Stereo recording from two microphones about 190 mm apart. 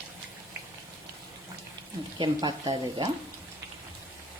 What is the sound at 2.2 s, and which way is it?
Speech, 20° right (ahead or behind).